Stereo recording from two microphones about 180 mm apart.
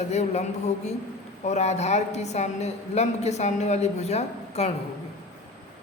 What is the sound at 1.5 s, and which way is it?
A woman's voice, 40° left (ahead or behind).